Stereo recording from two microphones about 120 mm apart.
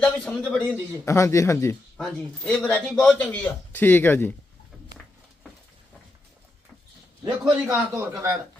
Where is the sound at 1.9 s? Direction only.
5° left (ahead or behind).